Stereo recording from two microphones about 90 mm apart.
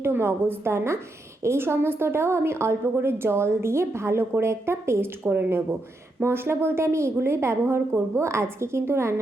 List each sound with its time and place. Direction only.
0.0 s a woman's voice: 25° right (ahead or behind)